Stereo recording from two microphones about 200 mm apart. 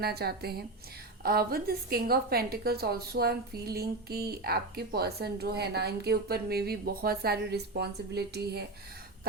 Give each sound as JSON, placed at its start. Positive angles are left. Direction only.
{"t": 0.0, "sound": "a woman's voice", "side_deg": -50}